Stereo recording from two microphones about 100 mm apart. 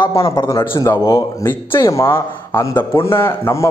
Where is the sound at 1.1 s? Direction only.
30° left (ahead or behind).